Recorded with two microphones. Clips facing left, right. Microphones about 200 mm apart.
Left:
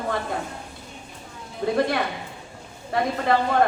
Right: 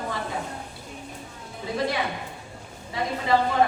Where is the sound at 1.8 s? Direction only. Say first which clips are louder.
Left 1 dB; 55° left (ahead or behind).